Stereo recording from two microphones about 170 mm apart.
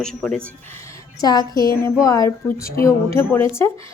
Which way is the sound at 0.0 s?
5° left (ahead or behind).